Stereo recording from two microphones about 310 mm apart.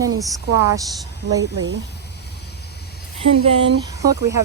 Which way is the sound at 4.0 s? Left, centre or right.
Centre.